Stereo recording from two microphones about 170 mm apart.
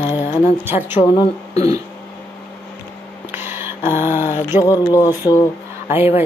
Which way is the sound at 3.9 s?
15° right (ahead or behind).